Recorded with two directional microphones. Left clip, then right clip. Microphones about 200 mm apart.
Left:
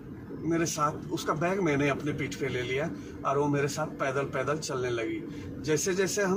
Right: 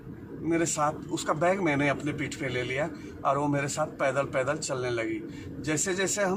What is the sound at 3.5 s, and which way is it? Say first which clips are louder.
Speech: right 1 dB; 30° right (ahead or behind).